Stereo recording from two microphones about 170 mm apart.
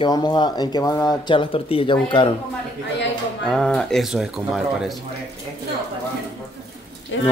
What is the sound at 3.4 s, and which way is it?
Speech, 5° left (ahead or behind).